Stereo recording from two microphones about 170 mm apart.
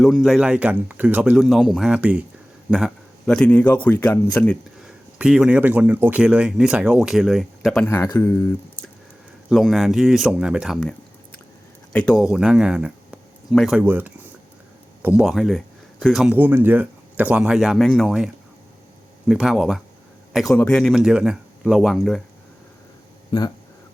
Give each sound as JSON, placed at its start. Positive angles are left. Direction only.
{"t": 0.0, "sound": "a man's voice", "side_deg": 0}
{"t": 4.8, "sound": "speech", "side_deg": -5}
{"t": 7.9, "sound": "speech", "side_deg": 15}
{"t": 9.5, "sound": "speech", "side_deg": 0}
{"t": 11.9, "sound": "speech", "side_deg": 0}
{"t": 16.3, "sound": "speech", "side_deg": -10}
{"t": 19.3, "sound": "a man's voice", "side_deg": -5}